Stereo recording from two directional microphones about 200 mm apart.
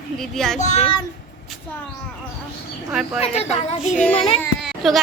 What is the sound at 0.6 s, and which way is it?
Speech, 35° left (ahead or behind).